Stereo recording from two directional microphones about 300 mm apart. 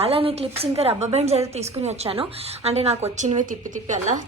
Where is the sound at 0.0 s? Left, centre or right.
Centre.